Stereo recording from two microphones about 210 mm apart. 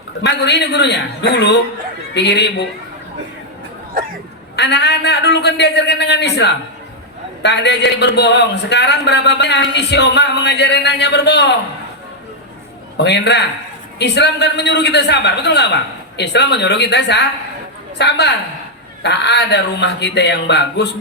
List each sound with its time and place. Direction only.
0.2 s a man's voice: 55° left (ahead or behind)
4.5 s a man's voice: 55° left (ahead or behind)
13.0 s a man's voice: 55° left (ahead or behind)